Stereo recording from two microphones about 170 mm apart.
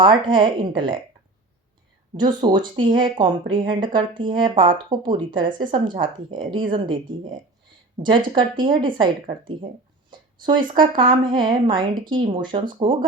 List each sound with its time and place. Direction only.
0.0 s speech: 30° right (ahead or behind)
2.1 s speech: 25° right (ahead or behind)
10.1 s speech: 30° right (ahead or behind)